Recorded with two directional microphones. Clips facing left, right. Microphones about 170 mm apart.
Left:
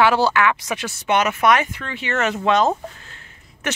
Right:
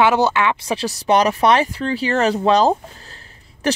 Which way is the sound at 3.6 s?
35° right (ahead or behind).